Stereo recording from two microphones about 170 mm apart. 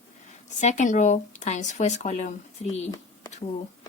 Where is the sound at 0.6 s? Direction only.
45° left (ahead or behind).